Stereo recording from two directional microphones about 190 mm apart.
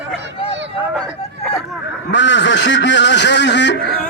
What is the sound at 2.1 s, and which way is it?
Speech, 70° left (ahead or behind).